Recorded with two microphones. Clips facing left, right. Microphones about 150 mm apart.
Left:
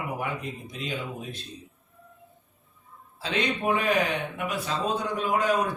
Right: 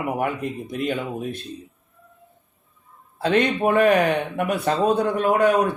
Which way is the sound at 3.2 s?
55° right (ahead or behind).